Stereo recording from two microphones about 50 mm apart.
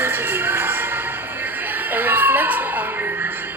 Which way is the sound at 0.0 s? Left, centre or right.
Right.